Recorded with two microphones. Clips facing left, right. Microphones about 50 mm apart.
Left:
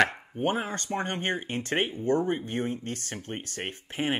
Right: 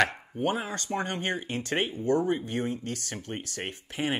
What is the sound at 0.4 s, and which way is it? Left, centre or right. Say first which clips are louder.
Speech: left 1 dB; left.